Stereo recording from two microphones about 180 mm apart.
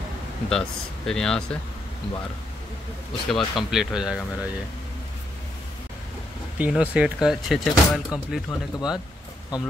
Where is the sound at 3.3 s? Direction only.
Centre (ahead or behind).